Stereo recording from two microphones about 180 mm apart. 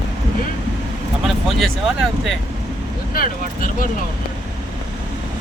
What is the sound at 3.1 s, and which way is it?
Speech, 50° left (ahead or behind).